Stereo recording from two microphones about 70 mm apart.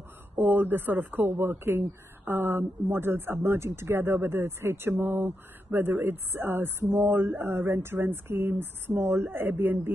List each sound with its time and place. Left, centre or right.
0.4 s speech: right